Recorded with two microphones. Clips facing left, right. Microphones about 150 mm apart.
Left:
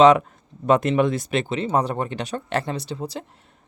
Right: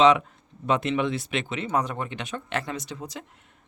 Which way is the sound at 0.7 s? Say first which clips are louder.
Left 6 dB; 45° left (ahead or behind).